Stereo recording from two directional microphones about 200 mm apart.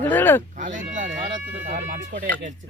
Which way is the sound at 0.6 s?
40° right (ahead or behind).